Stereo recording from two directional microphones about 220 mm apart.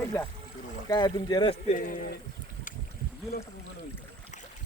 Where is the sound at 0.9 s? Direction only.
20° left (ahead or behind).